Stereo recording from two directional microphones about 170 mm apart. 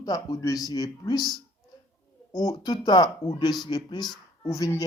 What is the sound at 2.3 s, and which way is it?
Speech, 20° left (ahead or behind).